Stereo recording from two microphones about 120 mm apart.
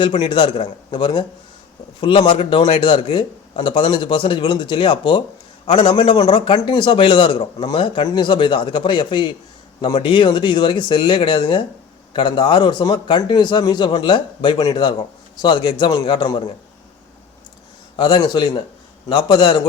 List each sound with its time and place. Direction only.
0.0 s a man's voice: 45° left (ahead or behind)
17.9 s a man's voice: 40° left (ahead or behind)